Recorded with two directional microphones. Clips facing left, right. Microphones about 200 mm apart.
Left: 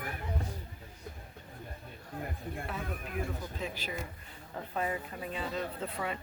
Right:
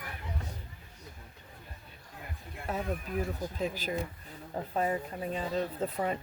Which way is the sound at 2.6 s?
40° right (ahead or behind).